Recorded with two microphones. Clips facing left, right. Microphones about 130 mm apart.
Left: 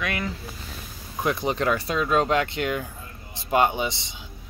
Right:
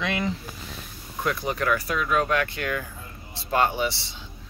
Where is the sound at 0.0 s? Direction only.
20° right (ahead or behind).